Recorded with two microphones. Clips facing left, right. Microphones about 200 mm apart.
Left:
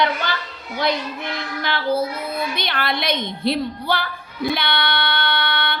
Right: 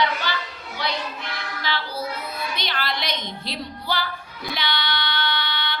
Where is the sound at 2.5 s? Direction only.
55° left (ahead or behind).